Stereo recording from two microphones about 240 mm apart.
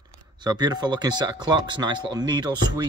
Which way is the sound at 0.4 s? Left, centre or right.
Centre.